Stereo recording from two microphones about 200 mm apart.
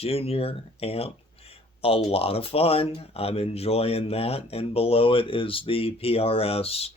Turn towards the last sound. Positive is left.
turn(degrees=30)  # may be behind; listen again after turning